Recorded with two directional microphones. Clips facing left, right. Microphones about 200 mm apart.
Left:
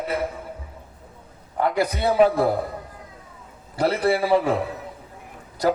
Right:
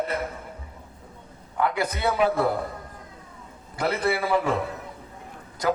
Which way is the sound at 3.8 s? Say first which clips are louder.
Left 4 dB; 35° left (ahead or behind).